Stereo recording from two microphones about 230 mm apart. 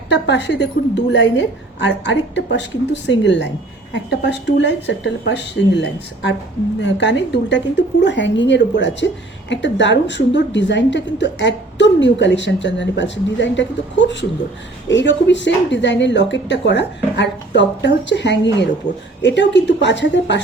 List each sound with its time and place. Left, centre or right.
0.1 s a woman's voice: left
14.8 s a woman's voice: left